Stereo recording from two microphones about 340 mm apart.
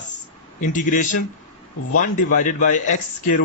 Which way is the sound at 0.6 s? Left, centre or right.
Left.